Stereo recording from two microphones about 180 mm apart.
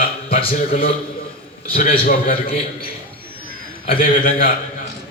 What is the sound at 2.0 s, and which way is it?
Speech, 55° left (ahead or behind).